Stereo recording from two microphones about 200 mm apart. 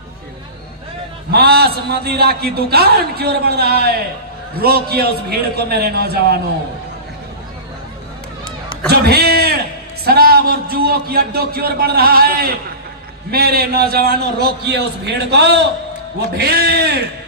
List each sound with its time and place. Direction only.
1.3 s a man's voice: 50° right (ahead or behind)
8.9 s a man's voice: 50° right (ahead or behind)